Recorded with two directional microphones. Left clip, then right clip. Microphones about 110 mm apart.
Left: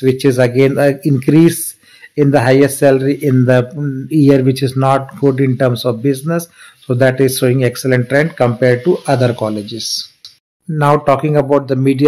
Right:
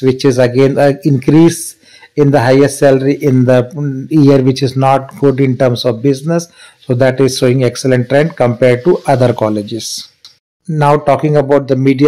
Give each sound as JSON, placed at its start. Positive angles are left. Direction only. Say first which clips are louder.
{"t": 0.0, "sound": "speech", "louder": "right 2 dB", "side_deg": -20}
{"t": 10.7, "sound": "speech", "louder": "right 2 dB", "side_deg": -25}